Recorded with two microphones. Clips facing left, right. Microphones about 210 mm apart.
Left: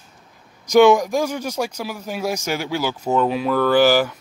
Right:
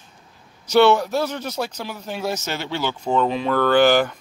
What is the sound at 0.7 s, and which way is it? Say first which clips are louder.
Speech: left 3 dB; 10° left (ahead or behind).